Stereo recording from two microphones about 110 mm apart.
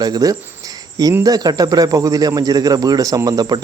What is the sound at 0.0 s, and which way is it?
Speech, 35° right (ahead or behind).